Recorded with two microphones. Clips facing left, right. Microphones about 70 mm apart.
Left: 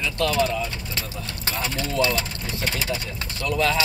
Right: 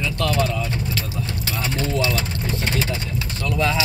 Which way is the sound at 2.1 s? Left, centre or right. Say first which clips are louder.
Right 2 dB; centre.